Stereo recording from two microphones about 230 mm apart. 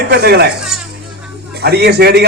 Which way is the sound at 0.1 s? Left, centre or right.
Right.